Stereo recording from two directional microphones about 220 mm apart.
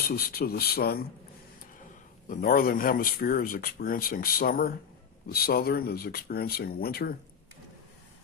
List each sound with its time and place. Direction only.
0.1 s speech: 45° left (ahead or behind)
2.2 s speech: 40° left (ahead or behind)